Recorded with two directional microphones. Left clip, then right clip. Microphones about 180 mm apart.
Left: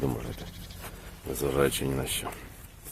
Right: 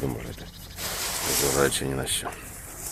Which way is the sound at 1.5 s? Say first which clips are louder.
Even; 10° left (ahead or behind).